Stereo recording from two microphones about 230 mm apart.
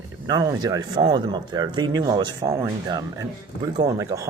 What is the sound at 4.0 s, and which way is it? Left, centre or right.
Speech, centre.